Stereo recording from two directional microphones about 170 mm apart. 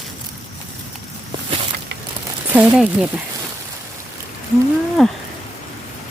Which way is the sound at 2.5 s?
5° right (ahead or behind).